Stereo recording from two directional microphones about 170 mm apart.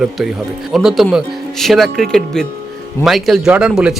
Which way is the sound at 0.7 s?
Centre (ahead or behind).